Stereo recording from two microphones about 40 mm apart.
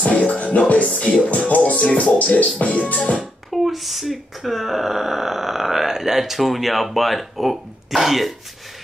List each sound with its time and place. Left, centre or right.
0.0 s music: left
3.6 s speech: centre